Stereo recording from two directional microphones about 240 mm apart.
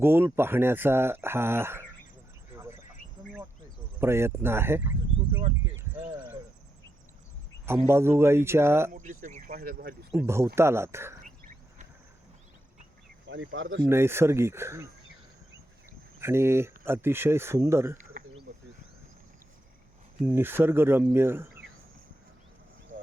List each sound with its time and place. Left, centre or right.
0.0 s speech: centre
4.0 s speech: centre
5.8 s basketball bounce: centre
7.6 s speech: centre
8.9 s speech: right
10.1 s speech: centre
11.2 s a sound: right
13.2 s speech: right
13.8 s speech: centre
16.2 s speech: centre
20.2 s speech: centre